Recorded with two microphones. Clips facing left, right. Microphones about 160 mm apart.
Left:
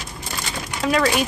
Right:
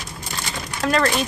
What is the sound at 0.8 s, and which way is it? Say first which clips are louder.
Speech: left 1 dB; 5° left (ahead or behind).